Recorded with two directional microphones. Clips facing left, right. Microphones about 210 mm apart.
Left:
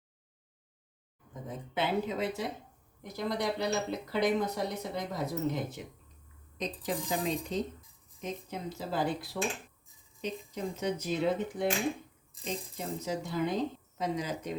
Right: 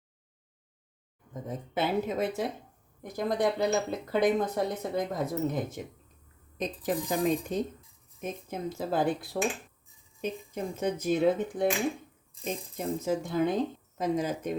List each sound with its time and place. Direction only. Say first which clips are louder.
1.3 s speech: right 4 dB; 45° right (ahead or behind)
12.7 s speech: right 8 dB; 50° right (ahead or behind)